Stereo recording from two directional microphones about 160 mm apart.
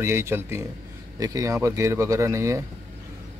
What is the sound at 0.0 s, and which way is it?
Speech, 15° right (ahead or behind).